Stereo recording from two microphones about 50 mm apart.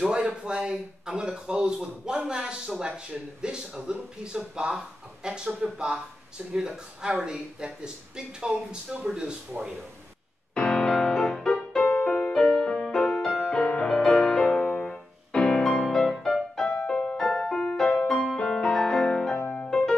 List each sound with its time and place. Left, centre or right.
0.0 s speech: centre
10.5 s music: left
11.0 s music: centre
11.8 s music: left
12.2 s music: centre
17.2 s music: centre
19.4 s music: left